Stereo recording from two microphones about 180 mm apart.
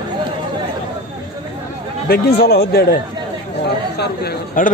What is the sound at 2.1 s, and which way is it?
A man's voice, 60° left (ahead or behind).